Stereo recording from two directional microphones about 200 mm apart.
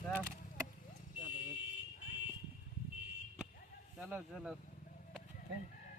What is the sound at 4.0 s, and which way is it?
Speech, 10° right (ahead or behind).